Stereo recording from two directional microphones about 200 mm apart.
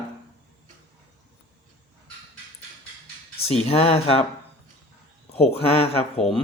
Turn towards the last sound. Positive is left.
turn(degrees=30)  # may be behind; listen again after turning